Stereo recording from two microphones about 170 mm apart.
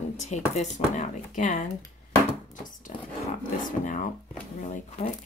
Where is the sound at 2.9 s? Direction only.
45° left (ahead or behind).